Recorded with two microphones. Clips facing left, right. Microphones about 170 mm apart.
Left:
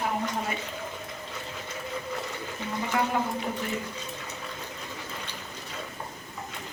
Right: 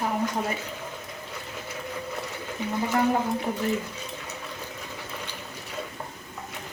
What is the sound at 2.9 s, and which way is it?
Speech, 35° right (ahead or behind).